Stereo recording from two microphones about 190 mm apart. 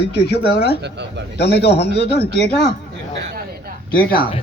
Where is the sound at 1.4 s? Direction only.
60° left (ahead or behind).